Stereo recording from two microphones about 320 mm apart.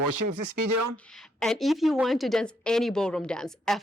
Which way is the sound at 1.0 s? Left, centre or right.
Centre.